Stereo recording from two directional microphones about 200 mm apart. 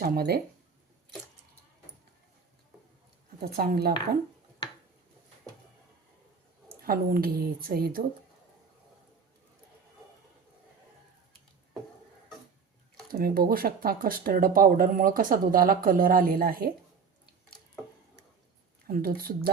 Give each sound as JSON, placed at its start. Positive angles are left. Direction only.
{"t": 0.0, "sound": "speech", "side_deg": -50}
{"t": 3.4, "sound": "speech", "side_deg": -50}
{"t": 6.7, "sound": "speech", "side_deg": -45}
{"t": 13.1, "sound": "speech", "side_deg": -45}
{"t": 18.9, "sound": "speech", "side_deg": -45}